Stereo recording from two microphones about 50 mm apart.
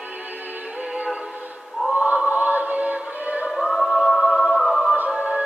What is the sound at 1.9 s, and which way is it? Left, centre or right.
Choir, right.